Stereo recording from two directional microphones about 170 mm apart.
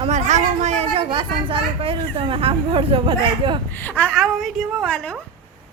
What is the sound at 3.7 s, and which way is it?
A woman's voice, 10° left (ahead or behind).